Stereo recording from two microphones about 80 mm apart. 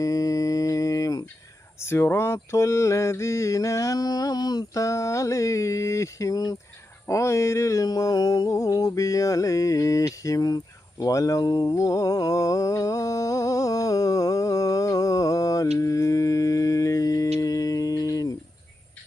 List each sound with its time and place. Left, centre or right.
0.0 s mantra: left
1.8 s mantra: left
7.1 s mantra: left